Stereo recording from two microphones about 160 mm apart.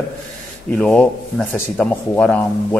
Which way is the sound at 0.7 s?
5° left (ahead or behind).